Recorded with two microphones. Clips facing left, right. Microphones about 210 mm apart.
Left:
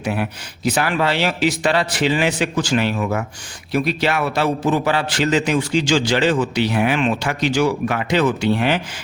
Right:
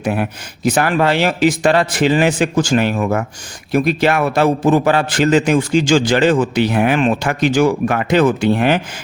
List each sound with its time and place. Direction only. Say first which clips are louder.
0.0 s a man's voice: right 4 dB; 50° right (ahead or behind)